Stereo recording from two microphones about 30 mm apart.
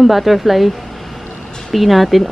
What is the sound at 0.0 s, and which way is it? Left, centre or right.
Speech, centre.